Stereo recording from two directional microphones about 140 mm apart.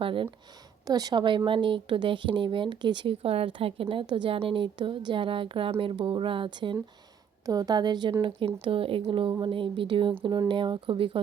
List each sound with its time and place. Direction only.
0.0 s speech: 35° right (ahead or behind)
0.9 s a woman's voice: 25° right (ahead or behind)